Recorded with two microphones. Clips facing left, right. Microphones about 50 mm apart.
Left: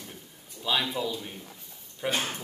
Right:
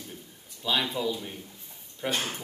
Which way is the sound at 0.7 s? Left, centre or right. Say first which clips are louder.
Right 1 dB; centre.